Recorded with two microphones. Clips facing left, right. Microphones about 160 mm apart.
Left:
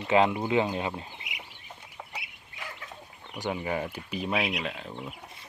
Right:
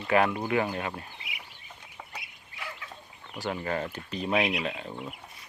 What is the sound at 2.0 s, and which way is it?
Chicken, 5° left (ahead or behind).